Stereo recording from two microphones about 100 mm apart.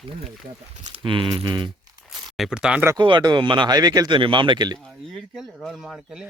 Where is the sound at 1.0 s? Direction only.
55° right (ahead or behind).